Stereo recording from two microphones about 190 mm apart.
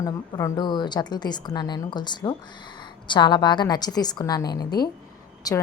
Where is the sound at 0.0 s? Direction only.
20° left (ahead or behind).